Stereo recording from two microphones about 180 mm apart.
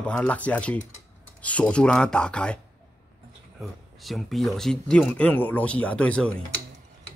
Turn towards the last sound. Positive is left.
turn(degrees=5)  # may be behind; listen again after turning